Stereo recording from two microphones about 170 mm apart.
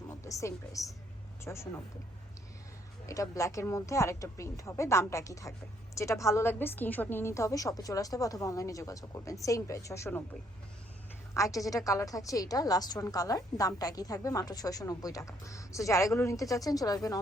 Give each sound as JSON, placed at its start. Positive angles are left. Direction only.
{"t": 0.1, "sound": "a woman's voice", "side_deg": 20}
{"t": 3.1, "sound": "a woman's voice", "side_deg": 20}
{"t": 11.3, "sound": "a woman's voice", "side_deg": 20}